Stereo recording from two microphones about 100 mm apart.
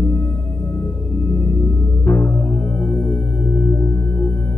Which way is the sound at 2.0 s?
25° left (ahead or behind).